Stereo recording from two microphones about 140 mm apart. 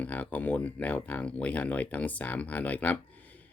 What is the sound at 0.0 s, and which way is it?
Speech, 10° left (ahead or behind).